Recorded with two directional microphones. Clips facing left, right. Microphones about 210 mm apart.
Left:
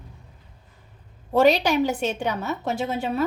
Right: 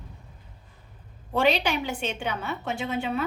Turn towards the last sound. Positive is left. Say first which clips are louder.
# left 3 dB
turn(degrees=40)  # may be behind; listen again after turning